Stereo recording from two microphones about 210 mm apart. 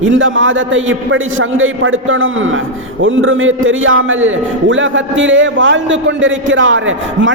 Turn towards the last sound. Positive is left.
turn(degrees=-65)  # may be behind; listen again after turning